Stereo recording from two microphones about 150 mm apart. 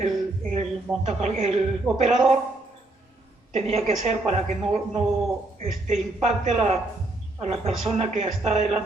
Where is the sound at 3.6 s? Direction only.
45° right (ahead or behind).